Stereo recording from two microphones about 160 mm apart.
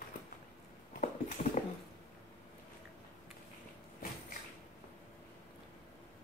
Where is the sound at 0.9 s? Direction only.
50° left (ahead or behind).